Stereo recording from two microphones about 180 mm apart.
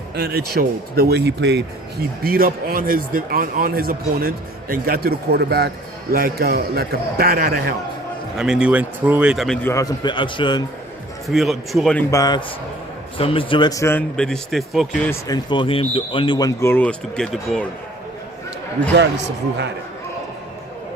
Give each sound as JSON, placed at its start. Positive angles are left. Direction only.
{"t": 0.2, "sound": "speech", "side_deg": -60}
{"t": 8.4, "sound": "speech", "side_deg": -5}
{"t": 9.6, "sound": "speech", "side_deg": 20}
{"t": 11.3, "sound": "speech", "side_deg": 0}
{"t": 12.1, "sound": "speech", "side_deg": 20}
{"t": 14.2, "sound": "speech", "side_deg": 0}
{"t": 15.3, "sound": "speech", "side_deg": 25}